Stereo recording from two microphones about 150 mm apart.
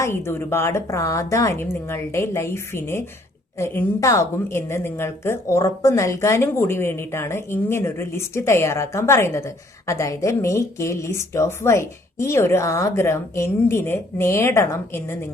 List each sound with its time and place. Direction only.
0.0 s a woman's voice: 15° left (ahead or behind)